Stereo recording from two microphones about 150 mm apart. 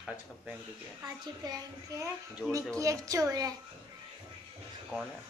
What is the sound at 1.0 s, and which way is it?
A man's voice, 25° right (ahead or behind).